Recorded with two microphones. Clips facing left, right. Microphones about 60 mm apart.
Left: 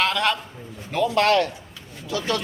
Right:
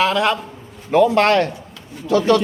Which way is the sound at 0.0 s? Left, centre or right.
Centre.